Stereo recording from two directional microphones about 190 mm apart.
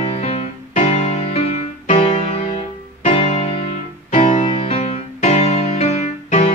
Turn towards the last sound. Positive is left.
turn(degrees=35)  # may be behind; listen again after turning